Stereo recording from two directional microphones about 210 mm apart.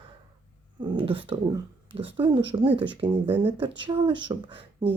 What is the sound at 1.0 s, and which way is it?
Speech, 25° right (ahead or behind).